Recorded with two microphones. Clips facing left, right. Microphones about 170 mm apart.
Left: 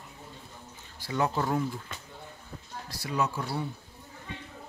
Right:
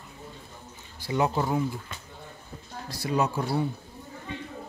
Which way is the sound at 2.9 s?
20° right (ahead or behind).